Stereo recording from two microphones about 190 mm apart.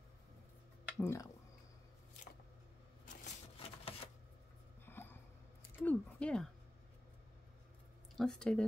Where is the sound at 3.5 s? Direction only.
30° left (ahead or behind).